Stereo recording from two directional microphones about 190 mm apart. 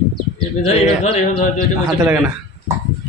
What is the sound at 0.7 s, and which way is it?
Music, 35° left (ahead or behind).